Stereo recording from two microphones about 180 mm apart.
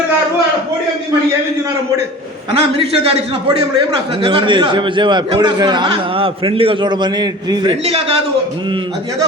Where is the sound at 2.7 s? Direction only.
35° right (ahead or behind).